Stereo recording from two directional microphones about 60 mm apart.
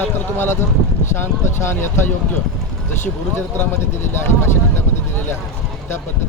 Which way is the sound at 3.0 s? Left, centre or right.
Left.